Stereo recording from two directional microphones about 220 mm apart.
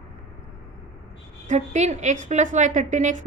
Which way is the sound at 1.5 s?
30° right (ahead or behind).